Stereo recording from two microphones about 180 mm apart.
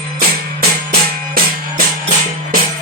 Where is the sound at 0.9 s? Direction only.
55° right (ahead or behind).